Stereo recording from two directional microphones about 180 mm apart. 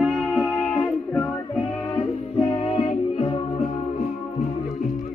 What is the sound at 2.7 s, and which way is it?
Music, 35° left (ahead or behind).